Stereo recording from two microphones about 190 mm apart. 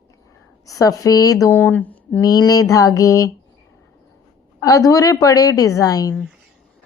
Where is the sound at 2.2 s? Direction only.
20° left (ahead or behind).